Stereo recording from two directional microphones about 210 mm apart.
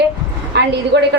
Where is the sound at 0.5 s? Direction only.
55° right (ahead or behind).